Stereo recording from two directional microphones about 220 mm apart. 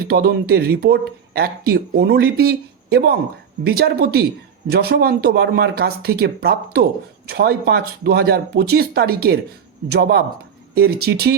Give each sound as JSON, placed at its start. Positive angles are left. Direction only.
{"t": 0.1, "sound": "speech", "side_deg": -45}